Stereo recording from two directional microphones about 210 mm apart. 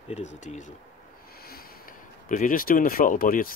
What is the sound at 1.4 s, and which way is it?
Speech, 45° left (ahead or behind).